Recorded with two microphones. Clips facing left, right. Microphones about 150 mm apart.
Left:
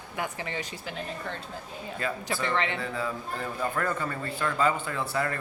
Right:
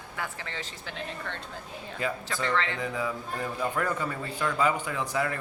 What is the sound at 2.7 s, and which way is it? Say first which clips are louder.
A man's voice: right 1 dB; 15° right (ahead or behind).